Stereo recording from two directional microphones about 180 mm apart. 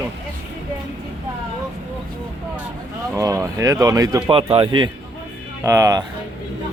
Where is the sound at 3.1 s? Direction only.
20° right (ahead or behind).